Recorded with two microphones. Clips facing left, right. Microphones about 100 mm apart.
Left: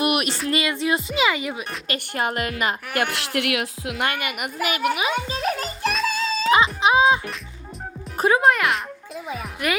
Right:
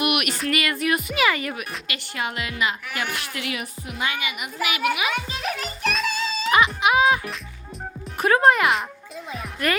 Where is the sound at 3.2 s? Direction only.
65° left (ahead or behind); by 5.0 s 40° left (ahead or behind).